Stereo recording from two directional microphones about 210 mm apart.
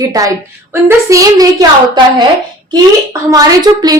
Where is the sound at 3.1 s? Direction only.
15° right (ahead or behind).